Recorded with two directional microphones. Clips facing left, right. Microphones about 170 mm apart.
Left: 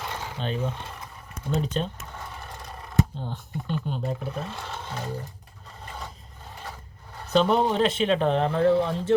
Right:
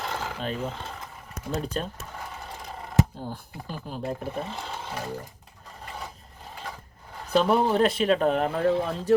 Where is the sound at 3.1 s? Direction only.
5° right (ahead or behind).